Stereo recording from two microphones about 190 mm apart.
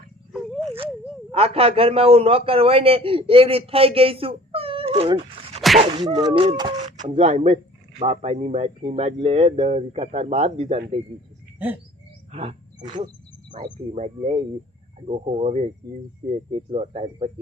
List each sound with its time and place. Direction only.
0.3 s dog: centre (ahead or behind)
1.3 s a man's voice: 30° right (ahead or behind)
12.3 s a man's voice: 30° right (ahead or behind)